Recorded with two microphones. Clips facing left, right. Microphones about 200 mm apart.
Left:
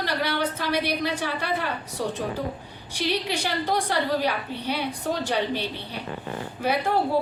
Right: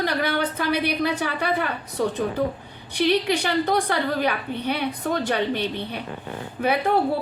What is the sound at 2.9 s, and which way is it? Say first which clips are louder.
A woman's voice: right 6 dB; 60° right (ahead or behind).